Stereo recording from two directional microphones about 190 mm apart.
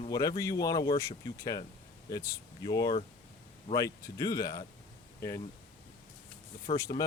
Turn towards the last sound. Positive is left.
turn(degrees=35)  # may be behind; listen again after turning